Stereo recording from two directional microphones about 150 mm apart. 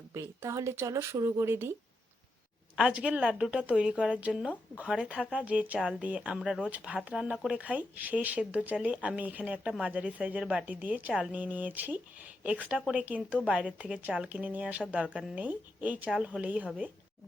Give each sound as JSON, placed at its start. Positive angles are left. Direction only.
{"t": 0.1, "sound": "speech", "side_deg": -20}
{"t": 2.7, "sound": "a woman's voice", "side_deg": -5}